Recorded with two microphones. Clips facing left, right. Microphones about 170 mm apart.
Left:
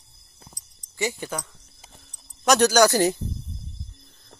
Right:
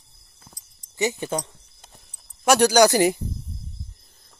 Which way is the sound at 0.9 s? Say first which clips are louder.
Right 4 dB; 20° right (ahead or behind).